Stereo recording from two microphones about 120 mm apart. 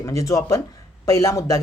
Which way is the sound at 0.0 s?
25° left (ahead or behind).